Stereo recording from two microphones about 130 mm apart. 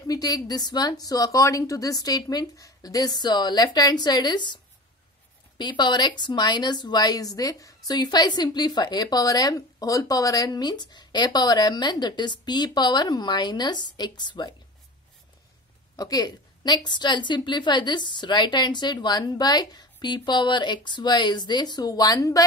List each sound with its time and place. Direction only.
0.0 s a woman's voice: 30° left (ahead or behind)
5.6 s speech: 35° left (ahead or behind)
16.0 s speech: 30° left (ahead or behind)